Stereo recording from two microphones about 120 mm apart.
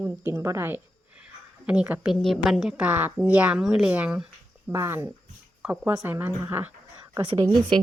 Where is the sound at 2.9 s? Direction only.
15° right (ahead or behind).